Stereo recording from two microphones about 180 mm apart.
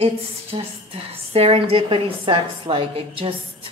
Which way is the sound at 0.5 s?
35° right (ahead or behind).